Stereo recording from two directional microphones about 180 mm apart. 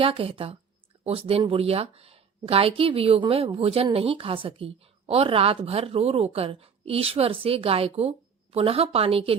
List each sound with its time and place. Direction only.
0.0 s a woman's voice: 30° right (ahead or behind)